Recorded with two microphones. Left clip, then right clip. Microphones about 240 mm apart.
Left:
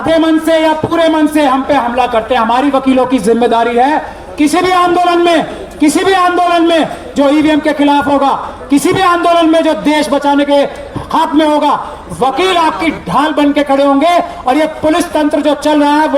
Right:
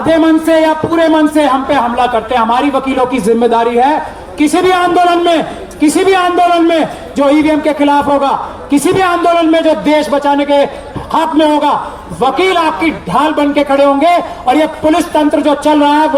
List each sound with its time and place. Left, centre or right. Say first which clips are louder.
0.1 s a man's voice: right 1 dB; left